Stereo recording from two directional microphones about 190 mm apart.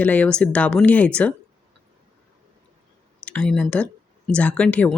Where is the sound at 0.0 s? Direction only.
10° left (ahead or behind).